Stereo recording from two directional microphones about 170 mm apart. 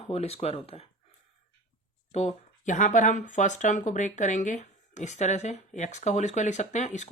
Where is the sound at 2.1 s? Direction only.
40° left (ahead or behind).